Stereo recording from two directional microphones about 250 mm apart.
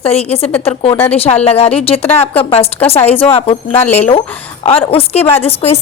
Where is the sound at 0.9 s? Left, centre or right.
Centre.